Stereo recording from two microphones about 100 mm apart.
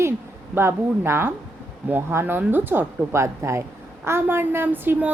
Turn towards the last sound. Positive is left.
turn(degrees=-20)  # may be behind; listen again after turning